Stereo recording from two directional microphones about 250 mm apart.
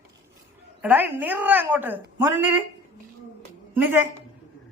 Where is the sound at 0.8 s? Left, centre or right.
Centre.